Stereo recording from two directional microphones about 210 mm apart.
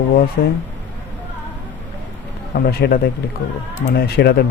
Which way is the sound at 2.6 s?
50° left (ahead or behind).